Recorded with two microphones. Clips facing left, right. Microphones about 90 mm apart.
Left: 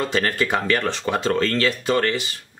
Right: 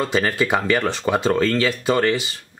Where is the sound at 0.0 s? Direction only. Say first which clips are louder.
Right 2 dB; 10° right (ahead or behind).